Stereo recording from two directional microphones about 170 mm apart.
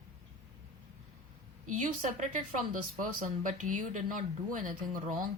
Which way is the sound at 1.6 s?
50° right (ahead or behind).